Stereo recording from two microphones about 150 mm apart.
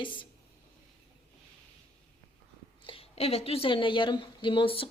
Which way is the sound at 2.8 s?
40° left (ahead or behind).